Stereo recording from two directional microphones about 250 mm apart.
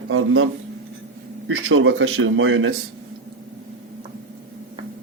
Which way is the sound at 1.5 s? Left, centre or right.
Right.